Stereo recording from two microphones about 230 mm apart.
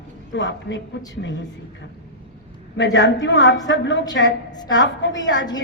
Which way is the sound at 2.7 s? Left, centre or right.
Left.